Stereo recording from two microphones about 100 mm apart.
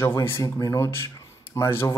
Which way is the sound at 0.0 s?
25° left (ahead or behind).